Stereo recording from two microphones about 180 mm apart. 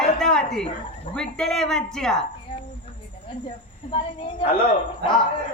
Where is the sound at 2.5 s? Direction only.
30° left (ahead or behind).